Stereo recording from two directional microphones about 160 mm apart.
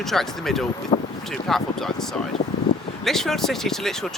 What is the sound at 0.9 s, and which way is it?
Speech, 35° left (ahead or behind).